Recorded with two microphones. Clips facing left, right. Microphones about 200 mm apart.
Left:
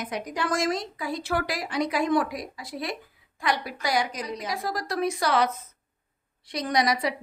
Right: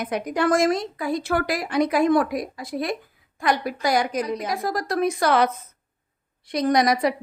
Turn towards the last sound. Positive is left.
turn(degrees=-50)  # may be behind; listen again after turning